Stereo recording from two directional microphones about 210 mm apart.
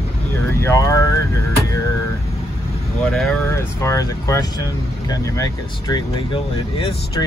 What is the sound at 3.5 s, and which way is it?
Speech, 15° left (ahead or behind).